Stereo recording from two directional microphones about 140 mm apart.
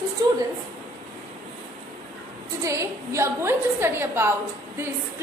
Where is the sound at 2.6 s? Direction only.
20° right (ahead or behind).